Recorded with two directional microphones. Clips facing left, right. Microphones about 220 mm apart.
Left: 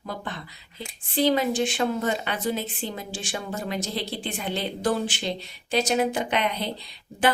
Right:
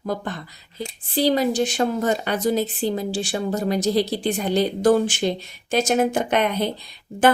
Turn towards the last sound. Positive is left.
turn(degrees=-50)  # may be behind; listen again after turning